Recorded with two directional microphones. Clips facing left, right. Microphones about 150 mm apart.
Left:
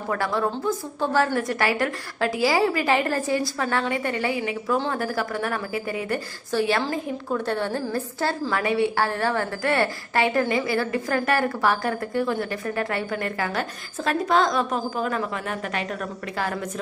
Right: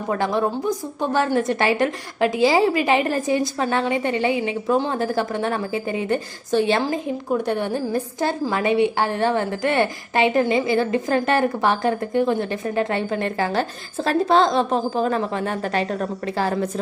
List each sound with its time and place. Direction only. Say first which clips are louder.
0.1 s a woman's voice: right 3 dB; 20° right (ahead or behind)